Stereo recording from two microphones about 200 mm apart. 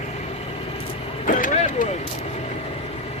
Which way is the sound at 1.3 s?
40° left (ahead or behind).